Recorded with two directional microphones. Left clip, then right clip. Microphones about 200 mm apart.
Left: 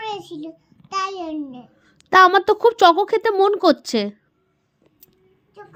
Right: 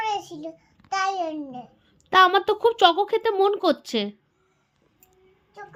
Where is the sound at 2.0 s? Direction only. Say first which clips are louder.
Left 5 dB; 30° left (ahead or behind).